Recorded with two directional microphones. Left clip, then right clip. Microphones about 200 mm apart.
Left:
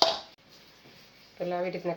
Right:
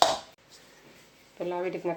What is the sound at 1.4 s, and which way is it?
Speech, 35° right (ahead or behind).